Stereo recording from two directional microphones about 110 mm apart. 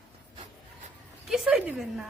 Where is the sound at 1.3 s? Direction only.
5° right (ahead or behind).